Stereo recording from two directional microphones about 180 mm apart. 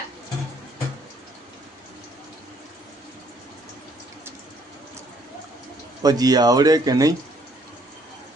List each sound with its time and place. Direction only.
6.0 s speech: 20° right (ahead or behind)